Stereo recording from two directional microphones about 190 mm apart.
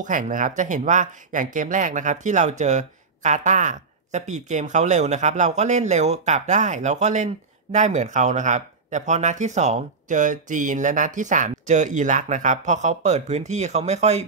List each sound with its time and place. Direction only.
0.0 s speech: 45° right (ahead or behind)